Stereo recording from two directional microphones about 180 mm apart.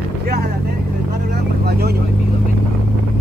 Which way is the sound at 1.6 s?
60° right (ahead or behind).